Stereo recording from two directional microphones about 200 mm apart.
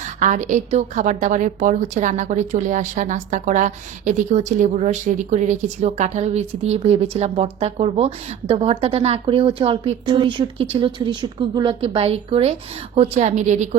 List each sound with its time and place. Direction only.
0.2 s a woman's voice: 40° right (ahead or behind)